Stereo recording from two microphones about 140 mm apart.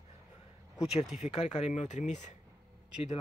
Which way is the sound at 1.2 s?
50° left (ahead or behind).